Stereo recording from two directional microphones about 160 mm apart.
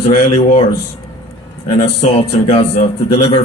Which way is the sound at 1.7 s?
40° left (ahead or behind).